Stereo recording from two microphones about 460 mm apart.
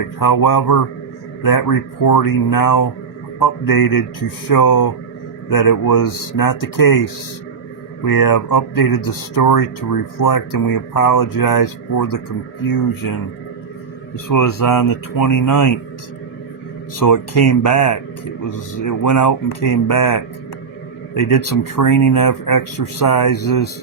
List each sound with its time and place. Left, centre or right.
0.2 s speech: left
14.3 s speech: left
17.0 s speech: left